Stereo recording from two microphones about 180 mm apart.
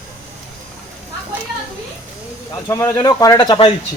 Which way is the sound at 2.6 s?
15° left (ahead or behind).